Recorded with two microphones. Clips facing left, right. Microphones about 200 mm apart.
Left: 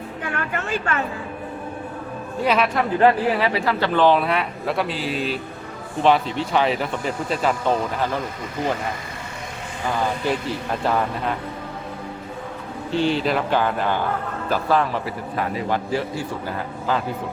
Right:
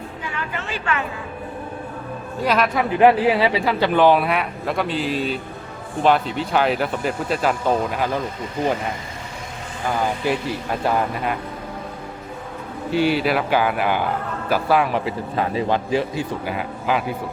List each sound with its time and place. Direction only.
0.2 s a woman's voice: 55° left (ahead or behind)
2.4 s speech: 5° left (ahead or behind)
3.0 s speech: 15° right (ahead or behind)
12.9 s a man's voice: 10° right (ahead or behind)